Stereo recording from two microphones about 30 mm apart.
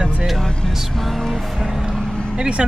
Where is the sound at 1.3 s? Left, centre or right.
Centre.